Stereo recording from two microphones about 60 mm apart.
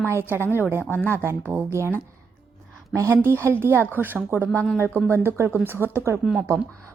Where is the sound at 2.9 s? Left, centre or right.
Right.